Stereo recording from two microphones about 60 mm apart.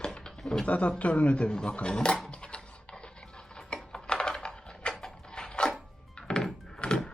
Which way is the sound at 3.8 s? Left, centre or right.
Centre.